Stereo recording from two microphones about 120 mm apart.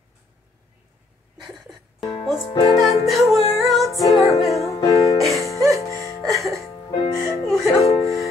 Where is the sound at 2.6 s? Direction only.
55° left (ahead or behind).